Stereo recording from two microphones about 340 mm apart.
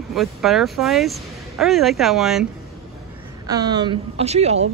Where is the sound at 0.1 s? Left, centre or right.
Centre.